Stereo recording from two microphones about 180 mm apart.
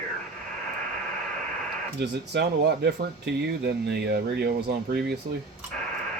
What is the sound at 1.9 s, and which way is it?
Speech, 70° right (ahead or behind).